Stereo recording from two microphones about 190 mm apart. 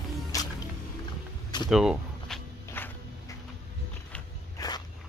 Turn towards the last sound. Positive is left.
turn(degrees=20)  # may be behind; listen again after turning